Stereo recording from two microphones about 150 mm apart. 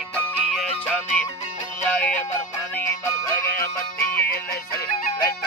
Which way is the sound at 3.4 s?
20° left (ahead or behind).